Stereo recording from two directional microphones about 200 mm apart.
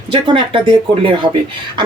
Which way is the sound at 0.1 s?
25° right (ahead or behind).